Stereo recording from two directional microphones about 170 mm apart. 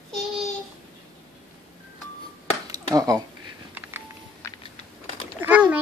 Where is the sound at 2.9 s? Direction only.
20° right (ahead or behind).